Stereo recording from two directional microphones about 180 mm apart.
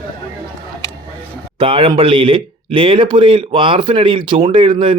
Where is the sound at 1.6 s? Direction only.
30° right (ahead or behind).